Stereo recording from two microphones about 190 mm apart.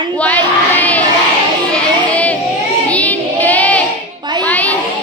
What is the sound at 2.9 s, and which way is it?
Child singing, 10° left (ahead or behind).